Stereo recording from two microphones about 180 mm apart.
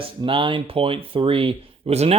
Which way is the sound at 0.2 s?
30° right (ahead or behind).